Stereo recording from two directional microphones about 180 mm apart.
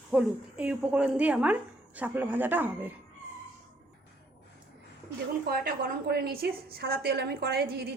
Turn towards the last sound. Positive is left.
turn(degrees=-60)  # may be behind; listen again after turning